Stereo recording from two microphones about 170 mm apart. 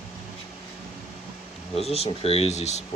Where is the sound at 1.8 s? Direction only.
35° left (ahead or behind).